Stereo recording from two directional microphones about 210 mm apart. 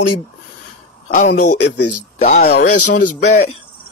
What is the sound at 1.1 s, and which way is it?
Speech, 35° left (ahead or behind).